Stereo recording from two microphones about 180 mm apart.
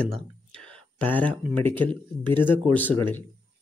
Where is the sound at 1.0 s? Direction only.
10° left (ahead or behind).